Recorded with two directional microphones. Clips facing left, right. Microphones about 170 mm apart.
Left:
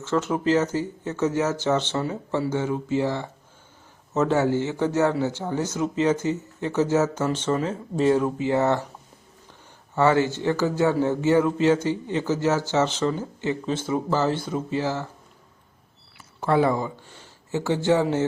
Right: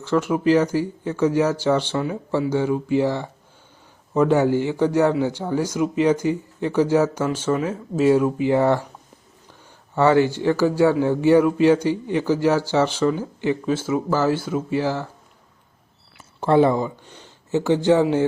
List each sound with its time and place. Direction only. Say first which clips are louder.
0.0 s speech: right 4 dB; 15° right (ahead or behind)
9.9 s speech: right 3 dB; 15° right (ahead or behind)
16.1 s speech: right 5 dB; 25° right (ahead or behind)